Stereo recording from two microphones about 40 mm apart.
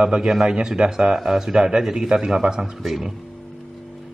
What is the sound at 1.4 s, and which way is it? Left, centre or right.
Speech, right.